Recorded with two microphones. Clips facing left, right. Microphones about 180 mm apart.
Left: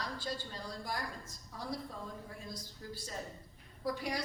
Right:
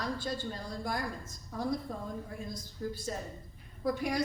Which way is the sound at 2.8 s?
40° right (ahead or behind).